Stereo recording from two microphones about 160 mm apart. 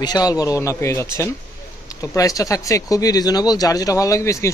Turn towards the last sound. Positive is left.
turn(degrees=20)  # may be behind; listen again after turning